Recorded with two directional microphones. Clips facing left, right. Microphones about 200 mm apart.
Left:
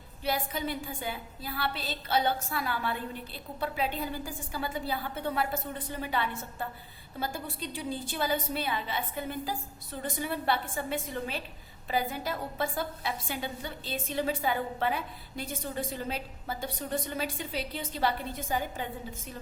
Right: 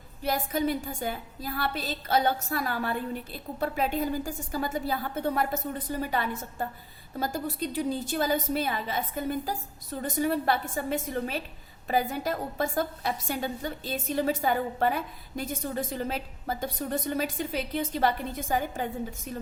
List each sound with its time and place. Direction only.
0.2 s a woman's voice: 45° right (ahead or behind)